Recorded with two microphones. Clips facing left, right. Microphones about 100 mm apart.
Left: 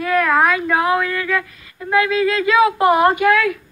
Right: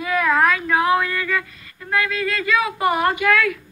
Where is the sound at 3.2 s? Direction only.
40° left (ahead or behind).